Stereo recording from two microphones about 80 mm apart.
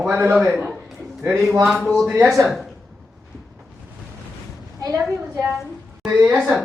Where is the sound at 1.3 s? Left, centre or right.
Centre.